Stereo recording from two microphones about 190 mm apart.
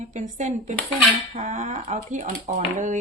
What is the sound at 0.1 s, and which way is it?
Speech, 40° right (ahead or behind).